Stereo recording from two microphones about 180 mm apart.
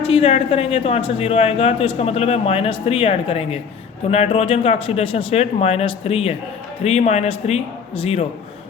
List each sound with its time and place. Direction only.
0.1 s a man's voice: 35° left (ahead or behind)